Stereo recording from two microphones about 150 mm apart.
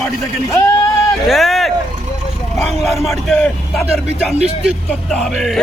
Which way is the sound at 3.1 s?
5° left (ahead or behind).